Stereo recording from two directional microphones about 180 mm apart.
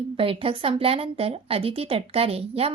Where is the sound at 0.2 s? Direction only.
30° right (ahead or behind).